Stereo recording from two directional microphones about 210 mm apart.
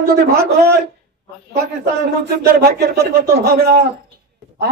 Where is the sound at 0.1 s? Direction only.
50° right (ahead or behind).